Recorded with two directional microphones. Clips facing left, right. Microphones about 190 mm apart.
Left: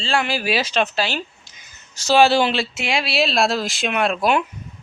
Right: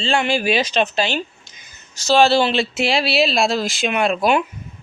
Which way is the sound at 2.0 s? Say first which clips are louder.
Right 1 dB; 10° left (ahead or behind).